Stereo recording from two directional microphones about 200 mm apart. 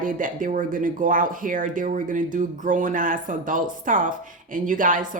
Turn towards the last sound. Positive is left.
turn(degrees=-40)  # may be behind; listen again after turning